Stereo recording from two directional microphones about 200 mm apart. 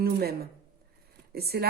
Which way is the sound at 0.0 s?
50° right (ahead or behind).